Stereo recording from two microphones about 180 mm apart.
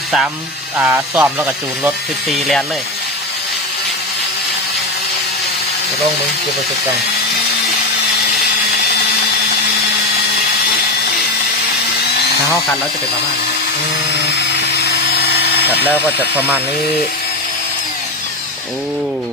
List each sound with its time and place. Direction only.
0.8 s speech: 10° right (ahead or behind)
2.3 s speech: centre (ahead or behind)
14.8 s a sound: 65° left (ahead or behind)